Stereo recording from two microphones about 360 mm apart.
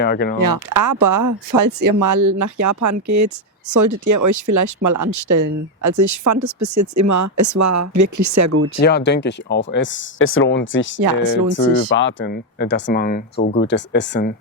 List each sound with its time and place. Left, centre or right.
0.0 s speech: left
0.3 s speech: right
8.5 s speech: right
8.8 s speech: left
11.9 s speech: left